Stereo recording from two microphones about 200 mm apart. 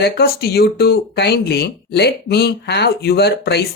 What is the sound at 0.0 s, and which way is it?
Speech, 55° left (ahead or behind).